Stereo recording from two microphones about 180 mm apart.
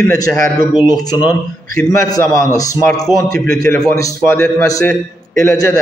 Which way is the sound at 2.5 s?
20° left (ahead or behind).